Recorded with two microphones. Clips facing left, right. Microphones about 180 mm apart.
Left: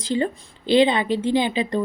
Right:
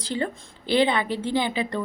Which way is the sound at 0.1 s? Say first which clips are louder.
Left 5 dB; 20° left (ahead or behind).